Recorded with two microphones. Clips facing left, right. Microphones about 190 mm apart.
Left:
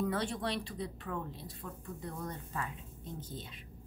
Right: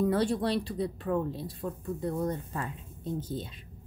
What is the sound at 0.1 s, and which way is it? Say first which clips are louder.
Speech: right 8 dB; 35° right (ahead or behind).